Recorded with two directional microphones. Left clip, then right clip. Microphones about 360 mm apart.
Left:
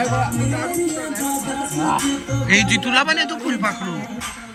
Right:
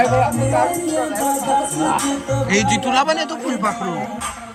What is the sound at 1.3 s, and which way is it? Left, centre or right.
Music, right.